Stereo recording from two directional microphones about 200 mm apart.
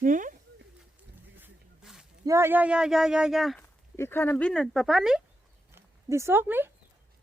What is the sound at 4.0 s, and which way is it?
Speech, 10° left (ahead or behind).